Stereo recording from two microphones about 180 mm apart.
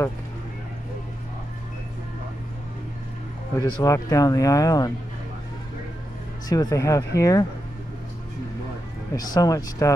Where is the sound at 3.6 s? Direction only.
20° left (ahead or behind).